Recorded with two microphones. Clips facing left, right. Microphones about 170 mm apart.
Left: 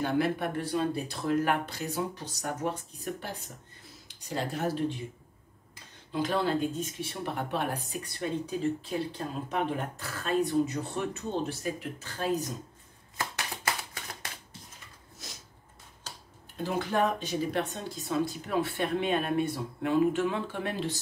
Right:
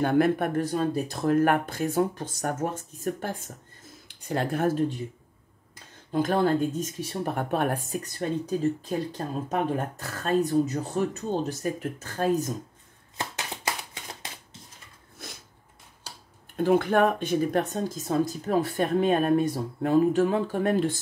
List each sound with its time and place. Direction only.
0.0 s speech: 50° right (ahead or behind)
6.1 s speech: 50° right (ahead or behind)
15.2 s a sound: 55° right (ahead or behind)
16.5 s speech: 55° right (ahead or behind)